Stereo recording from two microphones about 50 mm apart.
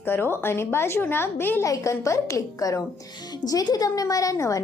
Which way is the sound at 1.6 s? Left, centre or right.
Left.